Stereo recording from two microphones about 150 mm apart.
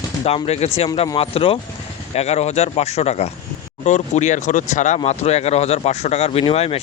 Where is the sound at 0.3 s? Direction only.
45° left (ahead or behind).